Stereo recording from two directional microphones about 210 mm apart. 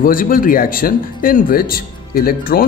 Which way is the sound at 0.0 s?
40° left (ahead or behind).